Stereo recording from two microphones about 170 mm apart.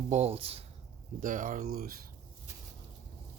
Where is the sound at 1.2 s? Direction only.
50° right (ahead or behind).